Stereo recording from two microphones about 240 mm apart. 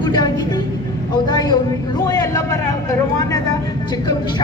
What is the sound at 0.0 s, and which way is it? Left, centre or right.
Vehicle, centre.